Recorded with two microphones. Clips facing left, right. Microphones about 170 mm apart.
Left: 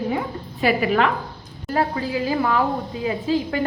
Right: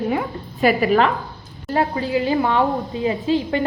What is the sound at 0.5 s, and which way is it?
Speech, 40° right (ahead or behind).